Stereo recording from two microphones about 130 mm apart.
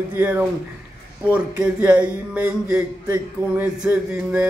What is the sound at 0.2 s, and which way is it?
Speech, 15° right (ahead or behind).